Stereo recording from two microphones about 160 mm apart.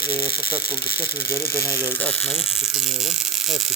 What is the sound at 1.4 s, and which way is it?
Speech, 70° left (ahead or behind).